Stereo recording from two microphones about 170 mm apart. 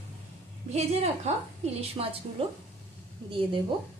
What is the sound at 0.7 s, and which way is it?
A woman's voice, 40° right (ahead or behind).